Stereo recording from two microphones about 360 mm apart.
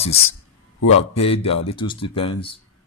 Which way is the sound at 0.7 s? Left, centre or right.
Left.